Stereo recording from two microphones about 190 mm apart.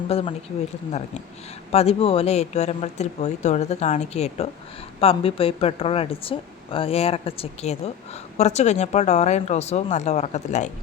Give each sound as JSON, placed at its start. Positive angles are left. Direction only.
{"t": 0.1, "sound": "speech", "side_deg": 30}
{"t": 1.7, "sound": "a woman's voice", "side_deg": 30}